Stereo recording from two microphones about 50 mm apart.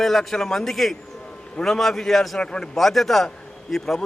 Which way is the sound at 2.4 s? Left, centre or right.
Centre.